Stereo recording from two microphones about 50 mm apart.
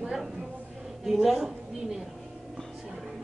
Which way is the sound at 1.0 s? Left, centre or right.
Centre.